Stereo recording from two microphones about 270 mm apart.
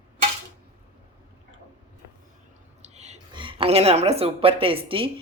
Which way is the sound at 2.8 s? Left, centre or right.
Right.